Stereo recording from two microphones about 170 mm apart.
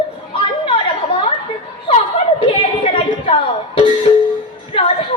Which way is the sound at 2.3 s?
30° left (ahead or behind).